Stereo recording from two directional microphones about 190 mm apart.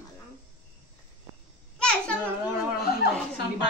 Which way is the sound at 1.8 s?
5° left (ahead or behind).